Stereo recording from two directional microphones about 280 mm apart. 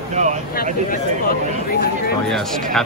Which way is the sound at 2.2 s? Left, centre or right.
Centre.